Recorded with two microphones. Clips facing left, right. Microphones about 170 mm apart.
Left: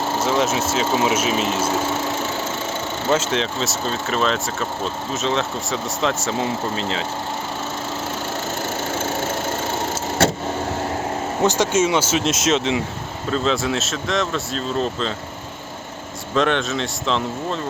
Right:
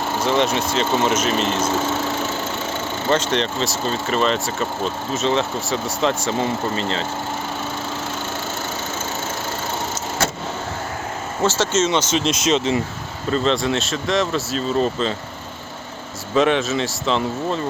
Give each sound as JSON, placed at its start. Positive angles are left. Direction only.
{"t": 0.2, "sound": "speech", "side_deg": 0}
{"t": 3.1, "sound": "speech", "side_deg": 5}
{"t": 11.4, "sound": "speech", "side_deg": 15}
{"t": 16.3, "sound": "speech", "side_deg": 0}